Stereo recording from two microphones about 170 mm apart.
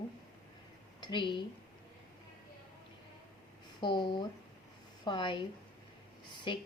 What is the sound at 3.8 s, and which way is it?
A woman's voice, 25° left (ahead or behind).